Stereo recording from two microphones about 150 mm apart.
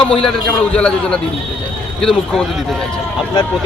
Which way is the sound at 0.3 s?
5° left (ahead or behind).